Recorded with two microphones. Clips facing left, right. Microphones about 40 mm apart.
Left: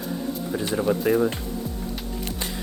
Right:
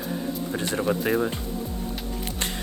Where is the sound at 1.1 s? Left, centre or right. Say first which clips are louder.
Left 4 dB; right.